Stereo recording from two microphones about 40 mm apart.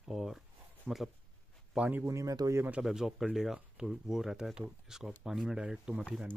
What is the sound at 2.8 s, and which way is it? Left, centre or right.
Speech, centre.